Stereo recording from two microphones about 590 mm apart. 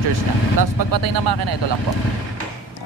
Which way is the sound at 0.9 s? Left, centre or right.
Right.